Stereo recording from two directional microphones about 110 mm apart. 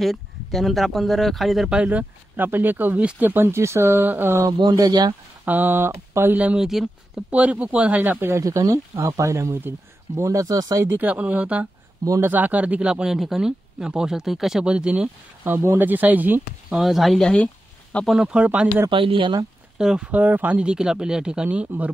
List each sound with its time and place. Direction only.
0.0 s speech: centre (ahead or behind); by 4.6 s 25° right (ahead or behind)
4.6 s speech: 40° right (ahead or behind)
5.4 s speech: 15° right (ahead or behind); by 10.9 s 35° right (ahead or behind)
10.9 s speech: 15° right (ahead or behind)
16.7 s speech: centre (ahead or behind)
18.1 s speech: 5° right (ahead or behind)
18.9 s speech: 50° right (ahead or behind)
19.8 s speech: 5° right (ahead or behind)